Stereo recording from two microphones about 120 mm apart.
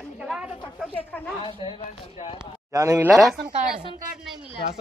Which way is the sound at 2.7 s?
30° right (ahead or behind).